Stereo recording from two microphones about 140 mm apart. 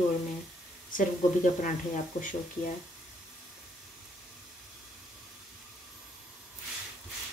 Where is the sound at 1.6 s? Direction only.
70° left (ahead or behind).